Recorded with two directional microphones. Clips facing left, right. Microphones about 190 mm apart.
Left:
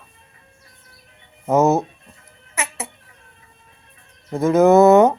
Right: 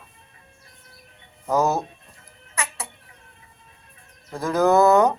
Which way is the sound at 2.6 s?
25° left (ahead or behind).